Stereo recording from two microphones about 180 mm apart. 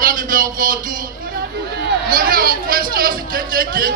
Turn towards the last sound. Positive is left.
turn(degrees=-55)  # may be behind; listen again after turning